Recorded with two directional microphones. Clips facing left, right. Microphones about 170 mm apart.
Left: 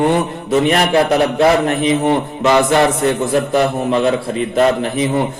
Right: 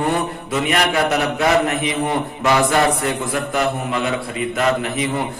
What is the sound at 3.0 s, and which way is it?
A man's voice, 30° left (ahead or behind).